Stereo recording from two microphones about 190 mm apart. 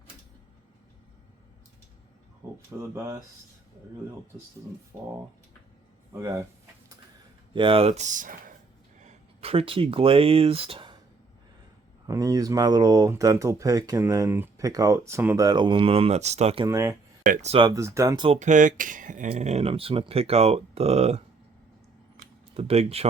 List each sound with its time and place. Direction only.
2.4 s a sound: 15° right (ahead or behind)
6.1 s speech: 15° right (ahead or behind)
7.5 s speech: 30° right (ahead or behind)
12.0 s speech: 20° right (ahead or behind); by 16.6 s 35° right (ahead or behind)
16.6 s speech: 15° right (ahead or behind)
17.2 s speech: 45° right (ahead or behind)
17.5 s speech: 20° right (ahead or behind)
18.3 s speech: 40° right (ahead or behind)
22.5 s speech: 30° right (ahead or behind)